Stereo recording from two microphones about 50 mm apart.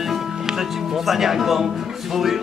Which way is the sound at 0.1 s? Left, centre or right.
Centre.